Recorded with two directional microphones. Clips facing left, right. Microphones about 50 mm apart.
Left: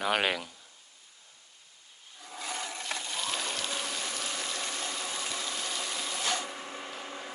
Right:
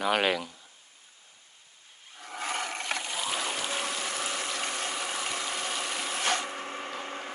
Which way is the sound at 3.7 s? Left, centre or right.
Right.